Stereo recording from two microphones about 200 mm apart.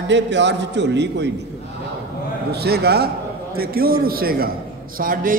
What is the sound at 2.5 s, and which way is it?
A man's voice, 55° right (ahead or behind).